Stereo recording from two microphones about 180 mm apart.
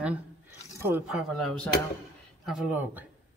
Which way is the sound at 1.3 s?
5° left (ahead or behind).